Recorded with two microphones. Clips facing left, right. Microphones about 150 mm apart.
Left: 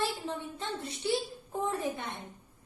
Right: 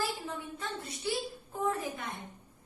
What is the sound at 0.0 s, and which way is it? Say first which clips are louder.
A woman's voice: left 2 dB; 25° left (ahead or behind).